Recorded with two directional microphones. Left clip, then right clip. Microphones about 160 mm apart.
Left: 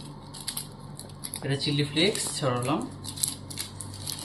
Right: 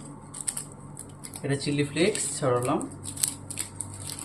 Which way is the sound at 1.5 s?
75° right (ahead or behind).